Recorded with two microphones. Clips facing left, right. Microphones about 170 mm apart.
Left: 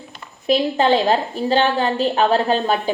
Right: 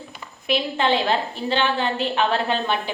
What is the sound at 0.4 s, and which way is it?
A woman's voice, 40° left (ahead or behind).